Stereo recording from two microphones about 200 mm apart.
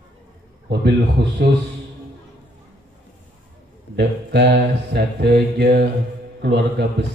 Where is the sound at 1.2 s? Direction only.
60° right (ahead or behind).